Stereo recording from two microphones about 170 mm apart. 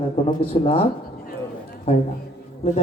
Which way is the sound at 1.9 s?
35° left (ahead or behind).